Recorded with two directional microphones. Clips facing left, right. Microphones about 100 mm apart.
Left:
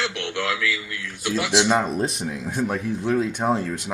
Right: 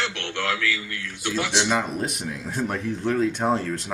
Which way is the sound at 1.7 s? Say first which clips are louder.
Left 3 dB; 30° left (ahead or behind).